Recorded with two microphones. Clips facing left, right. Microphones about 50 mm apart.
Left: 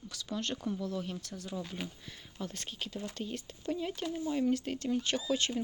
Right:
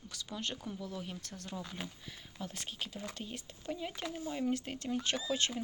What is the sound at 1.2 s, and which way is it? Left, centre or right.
Speech, right.